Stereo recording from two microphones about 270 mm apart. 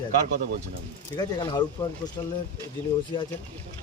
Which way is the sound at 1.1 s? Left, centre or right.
Centre.